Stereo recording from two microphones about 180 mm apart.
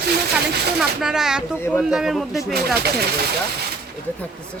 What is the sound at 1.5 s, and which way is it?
Speech, 10° left (ahead or behind).